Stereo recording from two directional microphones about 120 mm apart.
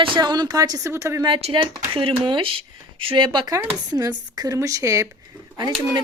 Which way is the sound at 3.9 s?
30° right (ahead or behind).